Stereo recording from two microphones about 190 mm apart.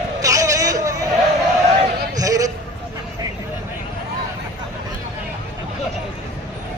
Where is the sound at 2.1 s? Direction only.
20° right (ahead or behind).